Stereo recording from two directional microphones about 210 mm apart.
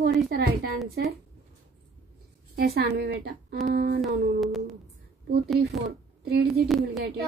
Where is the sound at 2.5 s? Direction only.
50° right (ahead or behind).